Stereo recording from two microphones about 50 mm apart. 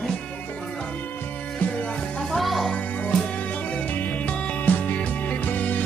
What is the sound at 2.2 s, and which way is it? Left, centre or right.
Music, centre.